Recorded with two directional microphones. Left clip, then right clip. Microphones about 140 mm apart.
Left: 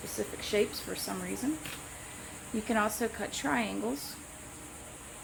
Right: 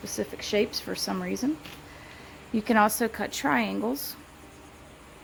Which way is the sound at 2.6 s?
90° right.